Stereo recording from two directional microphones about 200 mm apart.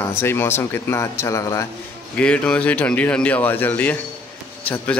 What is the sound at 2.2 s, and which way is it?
A man's voice, 5° left (ahead or behind).